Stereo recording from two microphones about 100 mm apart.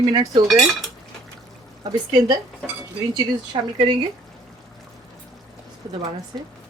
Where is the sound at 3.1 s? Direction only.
55° right (ahead or behind).